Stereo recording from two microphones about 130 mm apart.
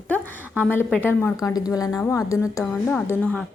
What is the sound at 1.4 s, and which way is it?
A woman's voice, 30° left (ahead or behind).